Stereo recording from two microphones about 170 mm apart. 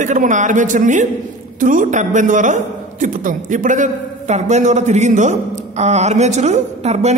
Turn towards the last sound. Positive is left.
turn(degrees=-40)  # may be behind; listen again after turning